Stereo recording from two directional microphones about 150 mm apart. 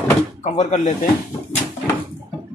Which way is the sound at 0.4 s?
50° left (ahead or behind).